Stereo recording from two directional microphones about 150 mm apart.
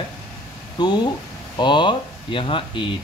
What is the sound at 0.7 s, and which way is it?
A man's voice, 30° left (ahead or behind).